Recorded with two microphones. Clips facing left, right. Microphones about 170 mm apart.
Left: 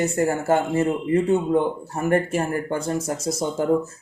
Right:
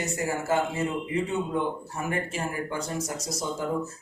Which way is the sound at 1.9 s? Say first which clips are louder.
Left 10 dB; 50° left (ahead or behind).